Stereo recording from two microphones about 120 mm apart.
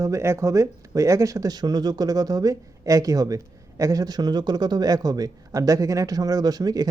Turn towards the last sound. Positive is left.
turn(degrees=-30)  # may be behind; listen again after turning